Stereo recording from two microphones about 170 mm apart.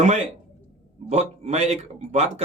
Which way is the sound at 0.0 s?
40° right (ahead or behind).